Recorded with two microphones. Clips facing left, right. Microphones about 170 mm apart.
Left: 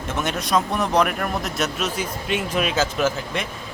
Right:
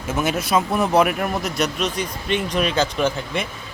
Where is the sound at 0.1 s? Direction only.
5° right (ahead or behind).